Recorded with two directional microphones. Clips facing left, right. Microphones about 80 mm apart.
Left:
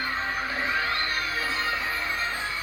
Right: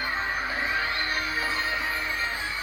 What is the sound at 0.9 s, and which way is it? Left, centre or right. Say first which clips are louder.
Music: even; right.